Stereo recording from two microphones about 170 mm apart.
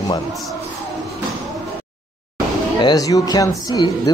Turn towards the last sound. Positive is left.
turn(degrees=20)  # may be behind; listen again after turning